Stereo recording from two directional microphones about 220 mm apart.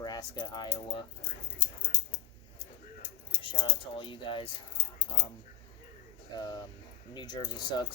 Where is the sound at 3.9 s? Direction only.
20° left (ahead or behind).